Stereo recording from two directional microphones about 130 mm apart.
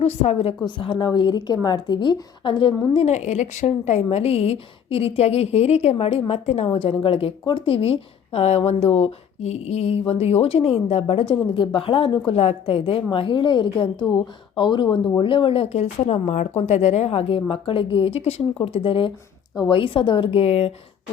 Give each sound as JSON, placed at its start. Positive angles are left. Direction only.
{"t": 0.0, "sound": "a woman's voice", "side_deg": 55}
{"t": 12.3, "sound": "a woman's voice", "side_deg": 50}